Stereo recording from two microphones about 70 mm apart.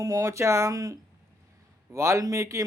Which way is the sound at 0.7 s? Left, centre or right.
Right.